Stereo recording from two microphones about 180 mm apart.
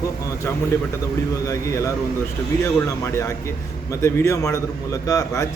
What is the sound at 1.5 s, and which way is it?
A man's voice, 15° left (ahead or behind).